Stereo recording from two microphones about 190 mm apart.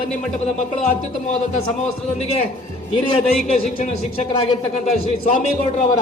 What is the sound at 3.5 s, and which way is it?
Speech, 35° left (ahead or behind).